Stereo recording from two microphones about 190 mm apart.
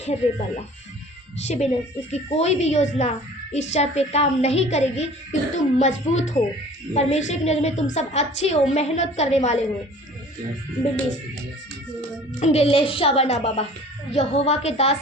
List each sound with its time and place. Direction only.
0.0 s a woman's voice: 35° left (ahead or behind)
12.4 s a woman's voice: 30° left (ahead or behind)